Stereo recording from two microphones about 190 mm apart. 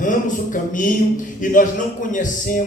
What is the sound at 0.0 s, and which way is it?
Speech, 45° left (ahead or behind).